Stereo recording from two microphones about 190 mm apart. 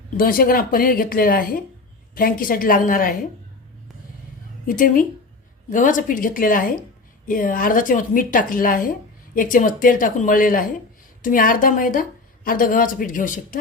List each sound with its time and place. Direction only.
0.2 s a woman's voice: 50° left (ahead or behind)
4.6 s a woman's voice: 45° left (ahead or behind)